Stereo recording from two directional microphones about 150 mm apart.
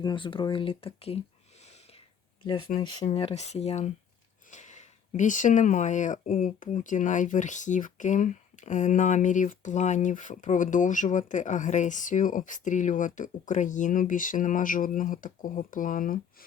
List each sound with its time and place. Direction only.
0.0 s speech: 30° left (ahead or behind)
2.8 s speech: 30° left (ahead or behind)
3.1 s speech: 45° left (ahead or behind); by 16.5 s 65° left (ahead or behind)